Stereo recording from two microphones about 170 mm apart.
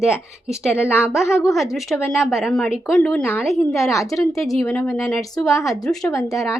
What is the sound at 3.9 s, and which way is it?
Speech, 20° left (ahead or behind).